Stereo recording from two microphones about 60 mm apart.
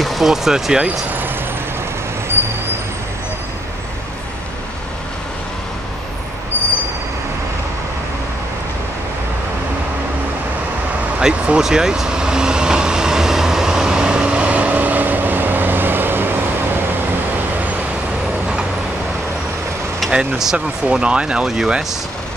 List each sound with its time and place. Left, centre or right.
0.0 s speech: centre
11.1 s vehicle: centre; by 16.3 s right
20.1 s speech: centre